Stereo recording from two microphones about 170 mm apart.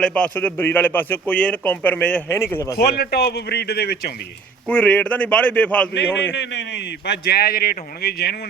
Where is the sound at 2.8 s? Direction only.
65° left (ahead or behind).